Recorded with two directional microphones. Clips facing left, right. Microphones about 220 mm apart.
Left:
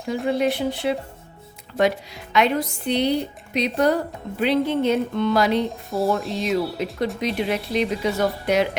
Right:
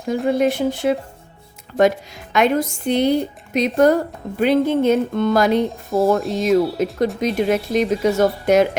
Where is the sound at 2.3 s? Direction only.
45° right (ahead or behind).